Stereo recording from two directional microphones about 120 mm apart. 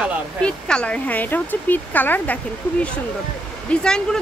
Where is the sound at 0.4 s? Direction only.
10° left (ahead or behind).